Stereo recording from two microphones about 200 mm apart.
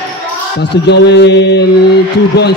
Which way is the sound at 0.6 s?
55° left (ahead or behind).